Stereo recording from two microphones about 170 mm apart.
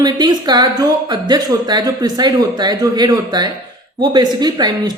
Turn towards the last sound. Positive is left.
turn(degrees=-25)  # may be behind; listen again after turning